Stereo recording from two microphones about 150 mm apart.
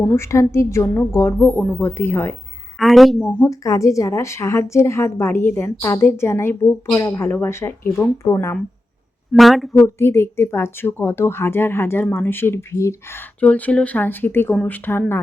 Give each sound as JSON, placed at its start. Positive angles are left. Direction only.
{"t": 0.2, "sound": "speech", "side_deg": 20}
{"t": 2.7, "sound": "a woman's voice", "side_deg": 0}
{"t": 3.4, "sound": "speech", "side_deg": 20}
{"t": 9.3, "sound": "speech", "side_deg": 0}
{"t": 9.7, "sound": "speech", "side_deg": 15}